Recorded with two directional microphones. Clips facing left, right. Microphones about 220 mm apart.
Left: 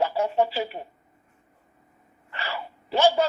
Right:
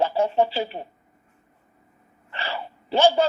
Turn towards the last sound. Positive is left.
turn(degrees=-30)  # may be behind; listen again after turning